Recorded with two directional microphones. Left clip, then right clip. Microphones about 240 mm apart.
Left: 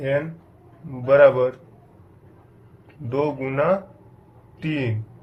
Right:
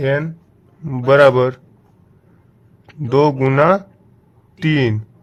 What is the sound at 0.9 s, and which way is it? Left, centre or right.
Speech, right.